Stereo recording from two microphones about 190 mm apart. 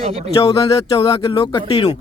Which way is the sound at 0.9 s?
30° left (ahead or behind).